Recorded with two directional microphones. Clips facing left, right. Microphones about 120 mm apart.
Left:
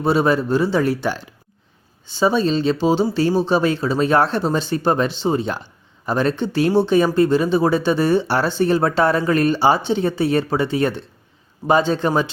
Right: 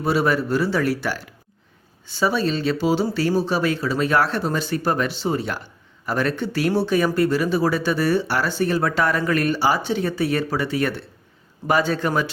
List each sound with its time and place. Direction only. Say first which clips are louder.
0.0 s speech: left 3 dB; 25° left (ahead or behind)